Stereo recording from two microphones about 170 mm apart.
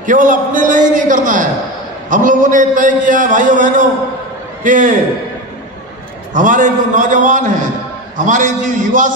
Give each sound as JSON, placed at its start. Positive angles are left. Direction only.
{"t": 0.0, "sound": "a man's voice", "side_deg": -50}
{"t": 6.3, "sound": "a man's voice", "side_deg": -50}